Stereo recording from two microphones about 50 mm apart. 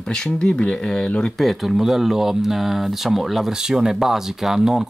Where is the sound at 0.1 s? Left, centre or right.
Centre.